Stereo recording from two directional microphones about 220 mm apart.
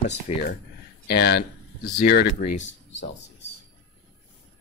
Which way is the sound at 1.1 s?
45° left (ahead or behind).